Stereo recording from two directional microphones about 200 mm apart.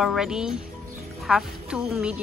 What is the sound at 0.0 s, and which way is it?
A woman's voice, centre (ahead or behind).